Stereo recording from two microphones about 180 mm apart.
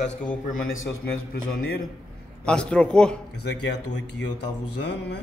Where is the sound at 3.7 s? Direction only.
80° left.